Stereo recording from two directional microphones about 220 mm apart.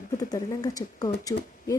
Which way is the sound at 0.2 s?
15° left (ahead or behind).